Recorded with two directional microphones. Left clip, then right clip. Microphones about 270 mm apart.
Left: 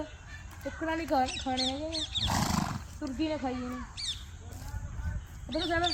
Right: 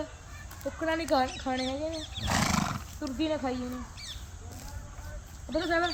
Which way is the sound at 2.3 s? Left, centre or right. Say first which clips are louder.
Right 3 dB; centre.